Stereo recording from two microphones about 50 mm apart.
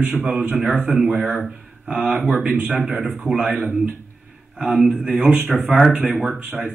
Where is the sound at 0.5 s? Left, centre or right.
Centre.